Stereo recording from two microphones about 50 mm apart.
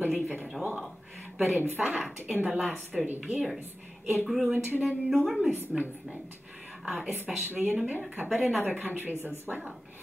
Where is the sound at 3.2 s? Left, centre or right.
Centre.